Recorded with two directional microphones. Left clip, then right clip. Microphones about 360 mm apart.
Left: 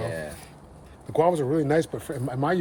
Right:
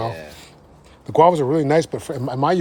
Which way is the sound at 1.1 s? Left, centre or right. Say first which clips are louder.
Right 8 dB; right.